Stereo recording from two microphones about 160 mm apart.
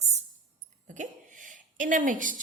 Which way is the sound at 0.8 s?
55° right (ahead or behind).